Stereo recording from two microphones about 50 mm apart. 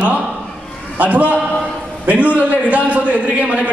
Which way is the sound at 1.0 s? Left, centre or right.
Right.